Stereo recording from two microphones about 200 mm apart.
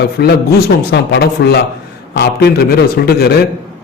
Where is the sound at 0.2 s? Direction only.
55° left (ahead or behind).